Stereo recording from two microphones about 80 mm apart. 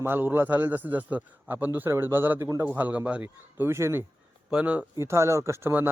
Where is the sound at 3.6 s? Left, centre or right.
Right.